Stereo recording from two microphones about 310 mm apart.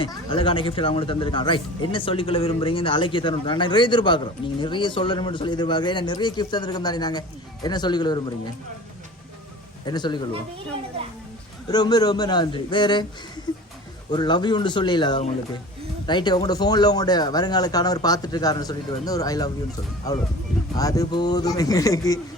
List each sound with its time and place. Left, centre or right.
0.0 s speech: centre
9.8 s speech: centre
11.7 s speech: centre
14.1 s speech: centre
20.7 s speech: centre